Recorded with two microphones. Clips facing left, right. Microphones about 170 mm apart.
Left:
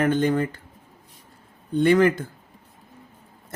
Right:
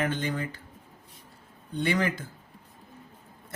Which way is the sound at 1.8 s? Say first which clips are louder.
Left 10 dB; 55° left (ahead or behind).